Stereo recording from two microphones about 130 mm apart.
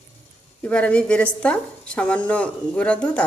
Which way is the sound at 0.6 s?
10° left (ahead or behind).